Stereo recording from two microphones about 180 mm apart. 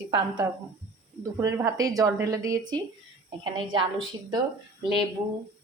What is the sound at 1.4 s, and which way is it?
A woman's voice, 15° right (ahead or behind).